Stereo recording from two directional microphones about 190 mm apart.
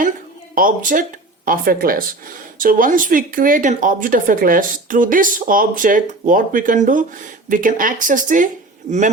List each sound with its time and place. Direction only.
0.5 s speech: 45° right (ahead or behind)